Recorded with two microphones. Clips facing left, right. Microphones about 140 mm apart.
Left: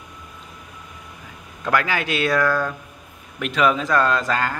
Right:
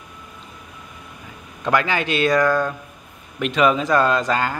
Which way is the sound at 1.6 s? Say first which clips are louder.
Right 2 dB; centre (ahead or behind).